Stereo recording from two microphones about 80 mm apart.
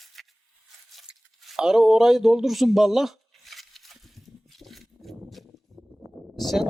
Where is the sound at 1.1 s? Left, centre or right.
Centre.